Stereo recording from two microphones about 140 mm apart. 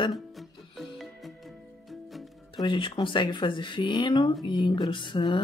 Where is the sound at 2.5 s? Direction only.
35° left (ahead or behind).